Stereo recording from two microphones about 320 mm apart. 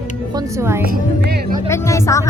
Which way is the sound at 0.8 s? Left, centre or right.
Right.